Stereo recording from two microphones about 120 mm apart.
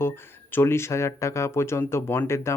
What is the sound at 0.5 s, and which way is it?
Speech, 20° left (ahead or behind).